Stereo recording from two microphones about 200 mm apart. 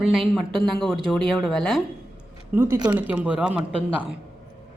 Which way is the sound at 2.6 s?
15° right (ahead or behind).